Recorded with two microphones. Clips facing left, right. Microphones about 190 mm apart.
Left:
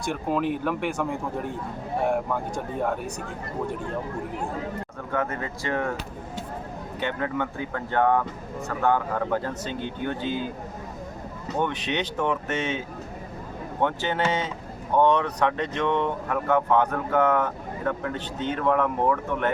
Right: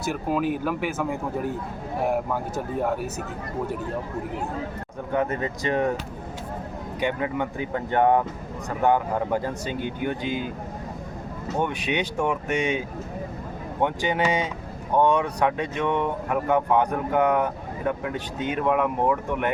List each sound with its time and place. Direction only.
0.0 s a man's voice: 5° right (ahead or behind)
5.1 s speech: 20° right (ahead or behind)
7.0 s speech: 15° right (ahead or behind)
11.6 s speech: 10° right (ahead or behind)
13.8 s speech: 15° right (ahead or behind)